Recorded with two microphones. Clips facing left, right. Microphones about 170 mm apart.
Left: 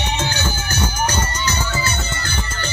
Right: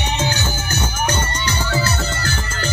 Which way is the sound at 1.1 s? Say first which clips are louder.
Right 1 dB; 30° right (ahead or behind).